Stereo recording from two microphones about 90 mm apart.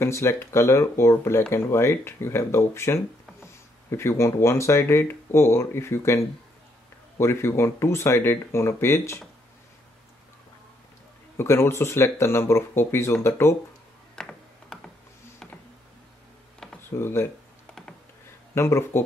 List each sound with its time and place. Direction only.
0.0 s speech: 30° left (ahead or behind)
11.3 s speech: 30° left (ahead or behind)
14.1 s typing: 5° left (ahead or behind)
16.9 s speech: 30° left (ahead or behind)
18.5 s speech: 30° left (ahead or behind)